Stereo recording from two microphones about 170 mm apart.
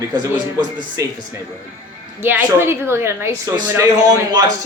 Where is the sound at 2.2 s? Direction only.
10° right (ahead or behind).